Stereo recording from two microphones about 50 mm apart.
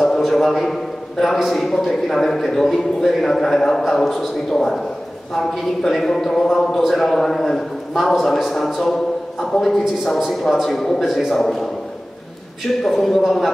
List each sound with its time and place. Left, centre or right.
0.0 s a sound: centre
1.2 s a man's voice: centre
12.8 s a man's voice: centre